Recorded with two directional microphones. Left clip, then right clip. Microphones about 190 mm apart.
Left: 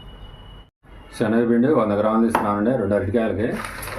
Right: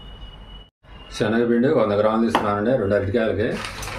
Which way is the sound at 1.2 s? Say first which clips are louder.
Even; 25° left (ahead or behind).